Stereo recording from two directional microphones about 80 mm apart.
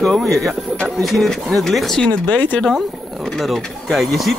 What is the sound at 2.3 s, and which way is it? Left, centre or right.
Speech, centre.